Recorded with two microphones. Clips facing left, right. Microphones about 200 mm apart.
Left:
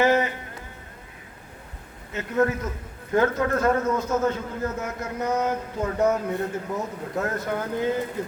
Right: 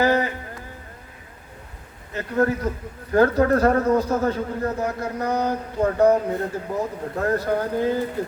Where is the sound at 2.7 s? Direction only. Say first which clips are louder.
Right 3 dB; 35° right (ahead or behind).